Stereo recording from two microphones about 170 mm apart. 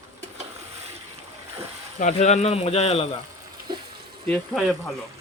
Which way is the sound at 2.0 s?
40° left (ahead or behind).